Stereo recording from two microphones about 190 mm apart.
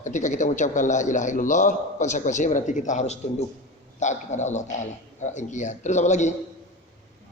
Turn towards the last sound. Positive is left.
turn(degrees=40)  # may be behind; listen again after turning